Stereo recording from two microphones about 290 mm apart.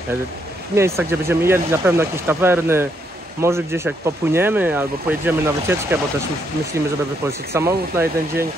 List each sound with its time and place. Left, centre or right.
0.7 s speech: centre
7.2 s speech: centre